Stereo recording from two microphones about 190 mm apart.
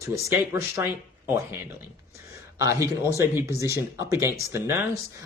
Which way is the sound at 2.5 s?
15° right (ahead or behind).